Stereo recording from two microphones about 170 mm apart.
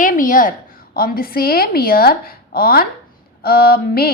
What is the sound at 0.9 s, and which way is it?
A woman's voice, 60° left (ahead or behind).